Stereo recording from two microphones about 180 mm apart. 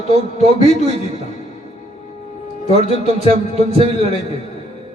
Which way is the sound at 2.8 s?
35° right (ahead or behind).